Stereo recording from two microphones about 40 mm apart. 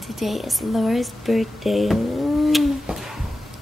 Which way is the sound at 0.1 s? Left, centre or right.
Centre.